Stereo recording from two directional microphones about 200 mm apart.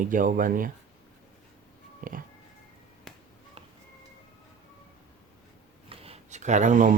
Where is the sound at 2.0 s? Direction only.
45° right (ahead or behind).